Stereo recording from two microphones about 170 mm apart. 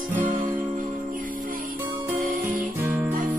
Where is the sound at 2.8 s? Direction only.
10° right (ahead or behind).